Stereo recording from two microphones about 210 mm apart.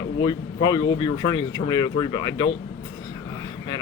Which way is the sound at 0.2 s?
20° left (ahead or behind).